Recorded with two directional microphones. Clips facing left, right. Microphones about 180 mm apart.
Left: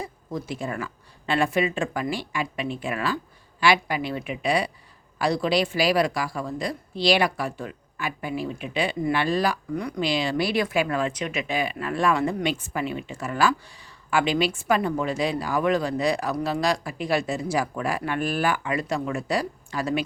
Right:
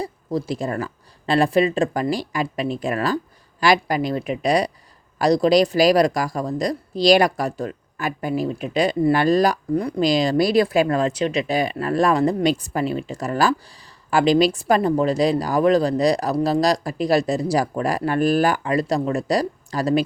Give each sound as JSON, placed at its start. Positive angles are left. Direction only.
{"t": 0.0, "sound": "a woman's voice", "side_deg": -35}